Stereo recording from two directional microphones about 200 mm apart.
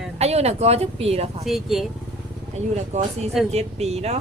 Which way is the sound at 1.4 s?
Centre (ahead or behind).